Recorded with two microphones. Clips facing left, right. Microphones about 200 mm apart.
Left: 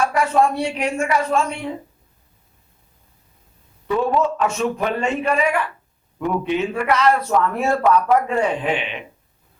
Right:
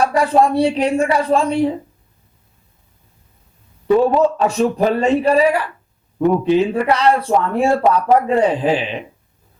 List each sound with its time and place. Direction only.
0.0 s a man's voice: 35° right (ahead or behind)
3.8 s a man's voice: 35° right (ahead or behind)